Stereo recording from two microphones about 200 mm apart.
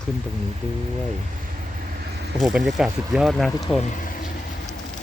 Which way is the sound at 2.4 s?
Centre (ahead or behind).